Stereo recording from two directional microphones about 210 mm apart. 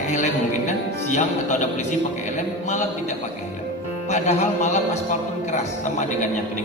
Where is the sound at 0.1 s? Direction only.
35° left (ahead or behind).